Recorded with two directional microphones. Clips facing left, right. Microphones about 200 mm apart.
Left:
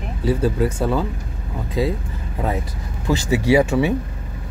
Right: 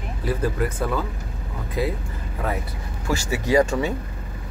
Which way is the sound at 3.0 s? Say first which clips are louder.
Left 6 dB; 20° left (ahead or behind).